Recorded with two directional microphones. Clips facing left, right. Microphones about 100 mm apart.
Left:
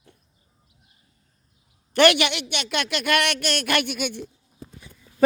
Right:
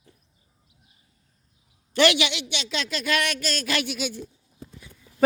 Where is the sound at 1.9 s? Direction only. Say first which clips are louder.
Left 3 dB; 55° left (ahead or behind).